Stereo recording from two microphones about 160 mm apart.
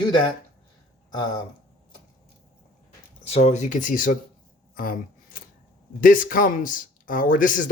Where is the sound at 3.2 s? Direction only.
40° left (ahead or behind).